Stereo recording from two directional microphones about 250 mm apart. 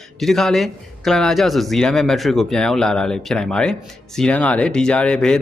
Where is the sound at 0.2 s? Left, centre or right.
Centre.